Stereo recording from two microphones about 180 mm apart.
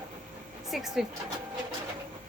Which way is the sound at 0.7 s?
Centre (ahead or behind).